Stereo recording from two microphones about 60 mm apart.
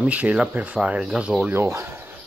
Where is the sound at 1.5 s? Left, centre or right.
Right.